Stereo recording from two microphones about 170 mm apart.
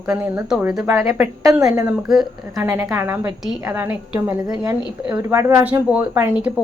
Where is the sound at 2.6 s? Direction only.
15° right (ahead or behind).